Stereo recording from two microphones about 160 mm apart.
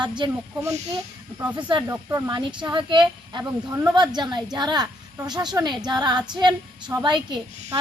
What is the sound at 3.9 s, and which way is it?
Speech, 25° right (ahead or behind).